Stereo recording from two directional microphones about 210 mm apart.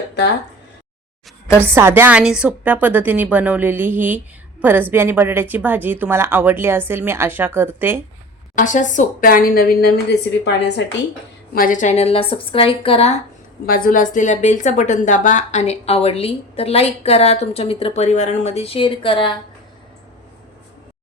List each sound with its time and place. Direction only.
1.6 s a woman's voice: 10° right (ahead or behind)
8.5 s a woman's voice: 35° left (ahead or behind); by 10.8 s 55° left (ahead or behind)
11.5 s a woman's voice: 40° left (ahead or behind)
13.7 s a woman's voice: 40° left (ahead or behind); by 19.4 s 25° left (ahead or behind)